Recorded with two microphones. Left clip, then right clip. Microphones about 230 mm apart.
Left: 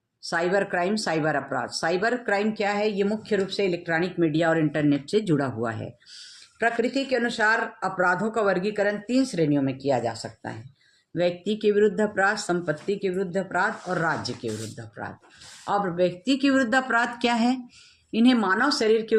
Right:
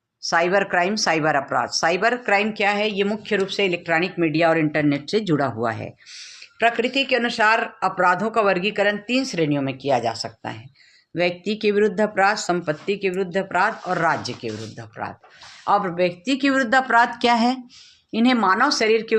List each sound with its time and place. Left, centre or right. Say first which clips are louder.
0.2 s speech: right 5 dB; right